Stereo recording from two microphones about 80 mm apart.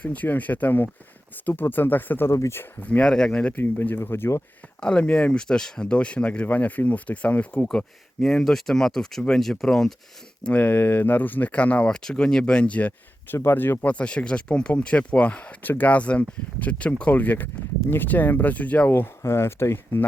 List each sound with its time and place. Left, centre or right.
0.0 s speech: centre
2.3 s speech: left
3.0 s speech: centre
3.6 s speech: left
4.8 s speech: centre
10.4 s speech: centre
13.3 s speech: left
18.9 s speech: left